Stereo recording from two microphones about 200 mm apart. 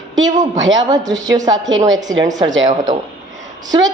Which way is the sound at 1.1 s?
20° right (ahead or behind).